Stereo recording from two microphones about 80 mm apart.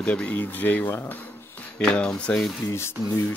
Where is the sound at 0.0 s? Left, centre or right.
Centre.